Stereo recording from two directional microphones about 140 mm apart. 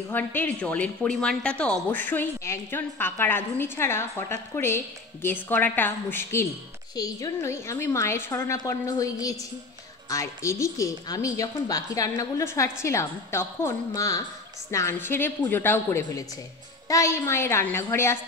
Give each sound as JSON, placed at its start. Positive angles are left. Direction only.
{"t": 0.1, "sound": "a woman's voice", "side_deg": 15}